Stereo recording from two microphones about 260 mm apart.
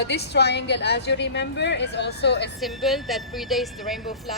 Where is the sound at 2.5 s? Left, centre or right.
Centre.